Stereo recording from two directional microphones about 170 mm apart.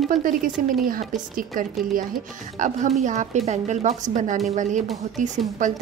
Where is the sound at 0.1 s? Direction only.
55° right (ahead or behind).